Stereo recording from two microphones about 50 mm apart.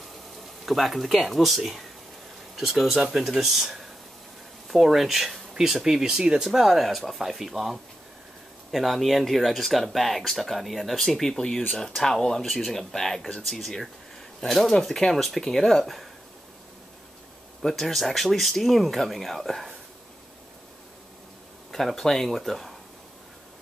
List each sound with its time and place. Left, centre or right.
0.7 s speech: centre
17.6 s speech: centre
21.7 s speech: centre